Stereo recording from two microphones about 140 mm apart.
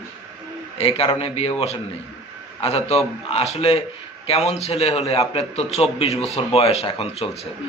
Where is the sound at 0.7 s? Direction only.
40° left (ahead or behind).